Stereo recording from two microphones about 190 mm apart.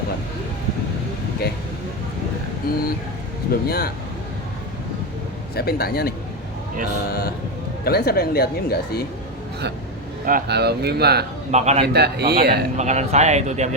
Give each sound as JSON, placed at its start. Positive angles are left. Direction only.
{"t": 2.7, "sound": "speech", "side_deg": 50}
{"t": 5.5, "sound": "a woman's voice", "side_deg": 55}
{"t": 10.2, "sound": "speech", "side_deg": -55}
{"t": 11.5, "sound": "speech", "side_deg": -35}
{"t": 11.9, "sound": "speech", "side_deg": -60}
{"t": 12.7, "sound": "speech", "side_deg": -35}